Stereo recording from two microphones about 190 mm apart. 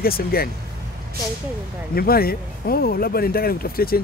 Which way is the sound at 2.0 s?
55° left (ahead or behind).